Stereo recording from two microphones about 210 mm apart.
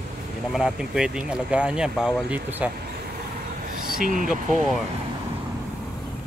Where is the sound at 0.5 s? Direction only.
Centre (ahead or behind).